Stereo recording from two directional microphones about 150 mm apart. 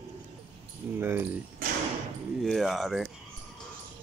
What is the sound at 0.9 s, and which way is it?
Speech, 15° right (ahead or behind).